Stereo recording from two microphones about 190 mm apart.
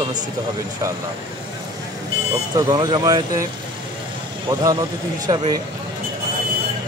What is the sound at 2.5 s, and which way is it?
Speech, 20° right (ahead or behind).